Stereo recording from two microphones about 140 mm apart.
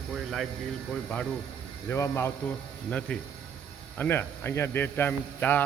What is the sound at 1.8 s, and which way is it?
Speech, 20° left (ahead or behind).